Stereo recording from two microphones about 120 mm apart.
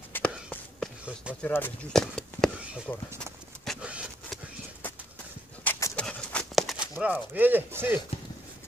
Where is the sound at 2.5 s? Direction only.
10° right (ahead or behind).